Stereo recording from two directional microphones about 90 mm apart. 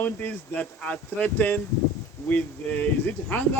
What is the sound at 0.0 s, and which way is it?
Speech, 20° left (ahead or behind).